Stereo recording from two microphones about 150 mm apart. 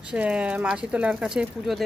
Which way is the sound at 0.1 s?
5° right (ahead or behind).